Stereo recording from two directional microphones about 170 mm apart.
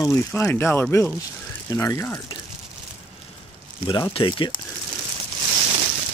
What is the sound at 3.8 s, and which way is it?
Speech, 25° left (ahead or behind).